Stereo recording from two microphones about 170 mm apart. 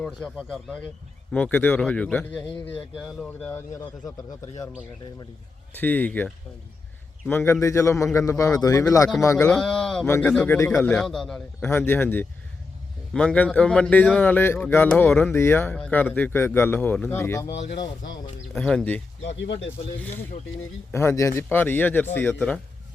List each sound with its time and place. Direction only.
0.0 s a man's voice: 5° left (ahead or behind)
5.7 s speech: 10° left (ahead or behind)
9.6 s a man's voice: 5° left (ahead or behind)
11.7 s speech: 10° left (ahead or behind)
17.5 s speech: 90° left
18.5 s a man's voice: 5° left (ahead or behind)
19.2 s speech: 90° left
20.0 s speech: 10° left (ahead or behind)